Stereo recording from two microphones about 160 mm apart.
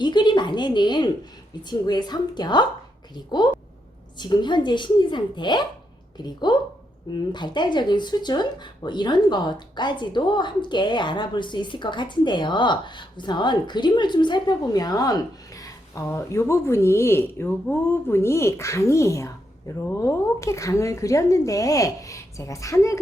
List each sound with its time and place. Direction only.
0.0 s a woman's voice: 30° left (ahead or behind)
4.2 s speech: 30° left (ahead or behind)